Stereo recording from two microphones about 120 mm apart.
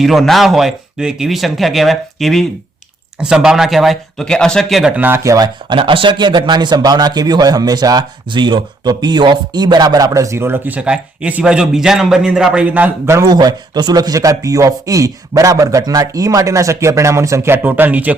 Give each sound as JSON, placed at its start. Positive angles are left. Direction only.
{"t": 0.0, "sound": "speech", "side_deg": 0}
{"t": 4.9, "sound": "a man's voice", "side_deg": -20}
{"t": 5.6, "sound": "a man's voice", "side_deg": -45}
{"t": 13.1, "sound": "a man's voice", "side_deg": -35}